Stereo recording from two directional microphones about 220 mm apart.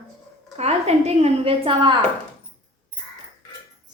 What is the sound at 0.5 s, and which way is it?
A woman's voice, 30° right (ahead or behind).